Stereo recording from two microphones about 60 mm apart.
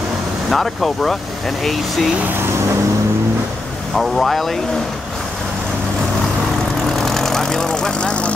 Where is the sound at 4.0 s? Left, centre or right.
Centre.